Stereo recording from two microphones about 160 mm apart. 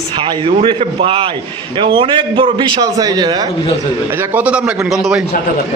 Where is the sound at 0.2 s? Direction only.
35° right (ahead or behind).